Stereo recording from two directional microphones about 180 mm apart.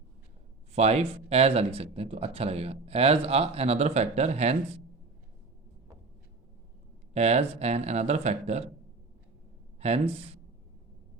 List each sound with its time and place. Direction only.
0.7 s speech: 35° right (ahead or behind)
7.1 s speech: 35° right (ahead or behind)